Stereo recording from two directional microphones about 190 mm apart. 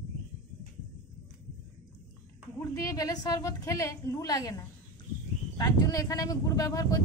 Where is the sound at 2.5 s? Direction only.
15° left (ahead or behind).